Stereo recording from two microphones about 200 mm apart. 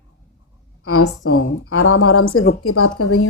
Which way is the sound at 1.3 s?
90° left.